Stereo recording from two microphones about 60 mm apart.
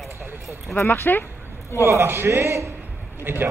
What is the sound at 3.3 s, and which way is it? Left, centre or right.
Speech, right.